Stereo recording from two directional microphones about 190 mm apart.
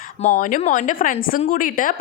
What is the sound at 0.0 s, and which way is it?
Speech, 40° left (ahead or behind).